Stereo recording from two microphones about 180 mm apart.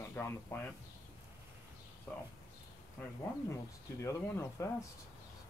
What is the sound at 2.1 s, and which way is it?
Speech, 10° left (ahead or behind).